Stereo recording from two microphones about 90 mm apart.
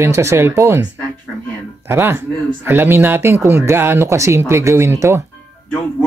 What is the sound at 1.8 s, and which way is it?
Speech, 25° right (ahead or behind).